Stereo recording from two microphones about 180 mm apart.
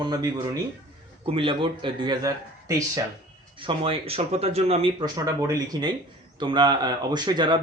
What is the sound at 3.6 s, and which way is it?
Speech, 30° right (ahead or behind).